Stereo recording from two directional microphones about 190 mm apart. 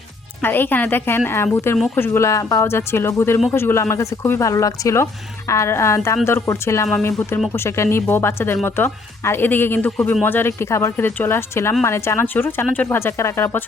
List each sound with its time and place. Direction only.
0.4 s speech: 10° left (ahead or behind)